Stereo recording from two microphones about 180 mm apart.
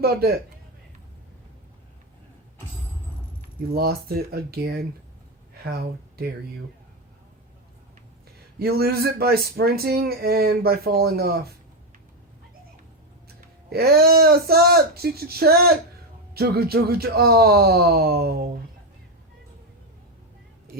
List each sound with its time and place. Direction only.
0.0 s speech: 60° right (ahead or behind)
3.7 s speech: 60° right (ahead or behind)
8.5 s speech: 60° right (ahead or behind)
13.7 s speech: 60° right (ahead or behind)